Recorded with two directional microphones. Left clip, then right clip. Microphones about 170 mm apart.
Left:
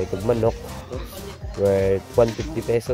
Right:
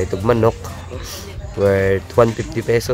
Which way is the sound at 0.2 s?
Centre (ahead or behind).